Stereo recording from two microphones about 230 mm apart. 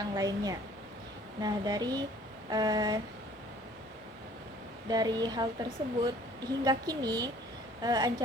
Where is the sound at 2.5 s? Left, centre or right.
Centre.